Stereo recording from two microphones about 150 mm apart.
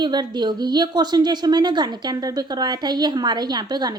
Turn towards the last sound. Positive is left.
turn(degrees=-30)  # may be behind; listen again after turning